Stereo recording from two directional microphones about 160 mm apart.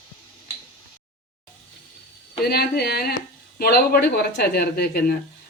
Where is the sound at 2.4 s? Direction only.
85° left.